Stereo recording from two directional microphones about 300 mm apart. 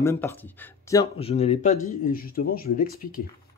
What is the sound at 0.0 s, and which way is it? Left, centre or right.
A man's voice, centre.